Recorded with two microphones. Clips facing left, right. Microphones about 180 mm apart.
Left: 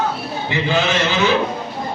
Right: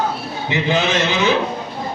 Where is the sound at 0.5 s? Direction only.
20° right (ahead or behind).